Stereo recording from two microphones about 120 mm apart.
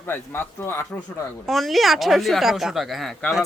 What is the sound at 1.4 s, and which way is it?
Speech, centre (ahead or behind).